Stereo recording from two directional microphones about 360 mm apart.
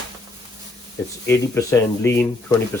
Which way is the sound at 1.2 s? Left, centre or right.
Centre.